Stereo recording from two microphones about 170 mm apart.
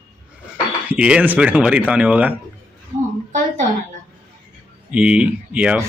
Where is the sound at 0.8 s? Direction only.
5° right (ahead or behind).